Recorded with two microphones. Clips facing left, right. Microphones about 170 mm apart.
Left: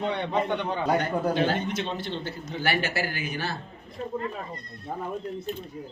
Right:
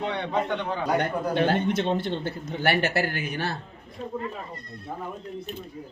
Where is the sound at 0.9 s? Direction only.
60° right (ahead or behind).